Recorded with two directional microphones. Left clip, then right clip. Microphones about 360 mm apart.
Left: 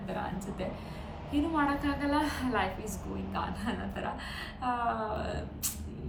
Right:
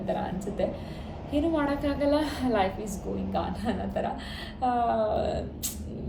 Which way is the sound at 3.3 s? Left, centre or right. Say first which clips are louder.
Right 4 dB; centre.